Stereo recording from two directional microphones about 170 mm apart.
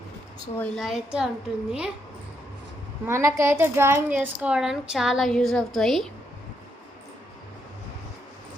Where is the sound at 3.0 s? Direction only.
15° right (ahead or behind); by 6.1 s centre (ahead or behind).